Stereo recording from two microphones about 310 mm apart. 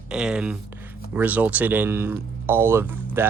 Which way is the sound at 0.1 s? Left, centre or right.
Centre.